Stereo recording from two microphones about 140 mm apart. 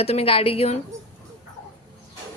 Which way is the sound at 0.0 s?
45° left (ahead or behind).